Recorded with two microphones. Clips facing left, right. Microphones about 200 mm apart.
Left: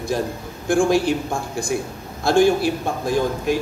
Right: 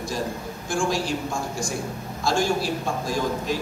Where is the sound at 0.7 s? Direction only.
55° left (ahead or behind).